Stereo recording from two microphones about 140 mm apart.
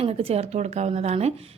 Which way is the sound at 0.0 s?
45° right (ahead or behind).